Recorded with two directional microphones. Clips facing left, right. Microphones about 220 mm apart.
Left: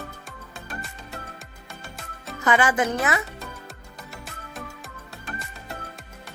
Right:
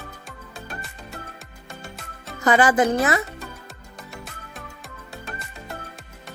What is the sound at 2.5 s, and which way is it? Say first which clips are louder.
Speech: right 4 dB; 35° right (ahead or behind).